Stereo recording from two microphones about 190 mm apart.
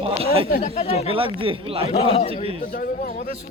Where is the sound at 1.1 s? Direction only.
30° right (ahead or behind).